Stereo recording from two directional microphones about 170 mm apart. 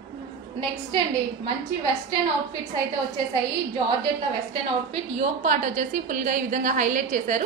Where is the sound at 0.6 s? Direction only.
30° right (ahead or behind).